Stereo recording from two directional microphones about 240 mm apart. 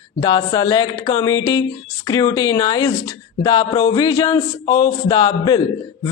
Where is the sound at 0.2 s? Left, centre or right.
Centre.